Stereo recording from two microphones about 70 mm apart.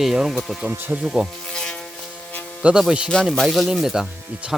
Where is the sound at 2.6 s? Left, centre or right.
Centre.